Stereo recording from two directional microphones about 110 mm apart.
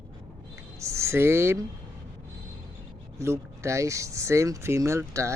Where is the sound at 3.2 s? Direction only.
25° right (ahead or behind).